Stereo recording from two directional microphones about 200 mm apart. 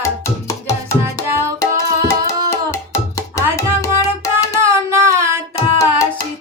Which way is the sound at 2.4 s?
15° left (ahead or behind).